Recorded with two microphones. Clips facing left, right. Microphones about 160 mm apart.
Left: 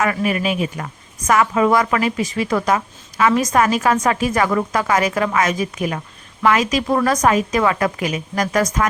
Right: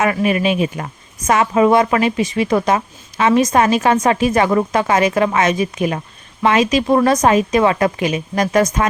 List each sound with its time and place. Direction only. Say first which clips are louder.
0.0 s a woman's voice: right 3 dB; 20° right (ahead or behind)